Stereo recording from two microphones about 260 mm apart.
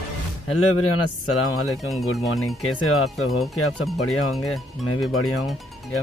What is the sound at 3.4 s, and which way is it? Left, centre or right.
Speech, centre.